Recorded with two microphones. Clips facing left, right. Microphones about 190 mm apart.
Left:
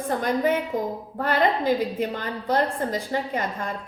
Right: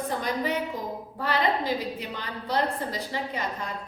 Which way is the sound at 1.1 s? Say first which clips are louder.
Left 4 dB; 50° left (ahead or behind).